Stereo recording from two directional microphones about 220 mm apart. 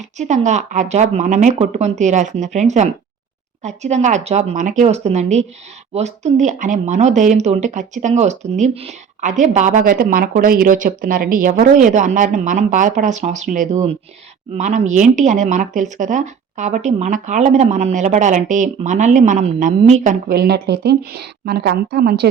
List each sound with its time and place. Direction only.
0.2 s speech: 30° right (ahead or behind); by 22.3 s 50° right (ahead or behind)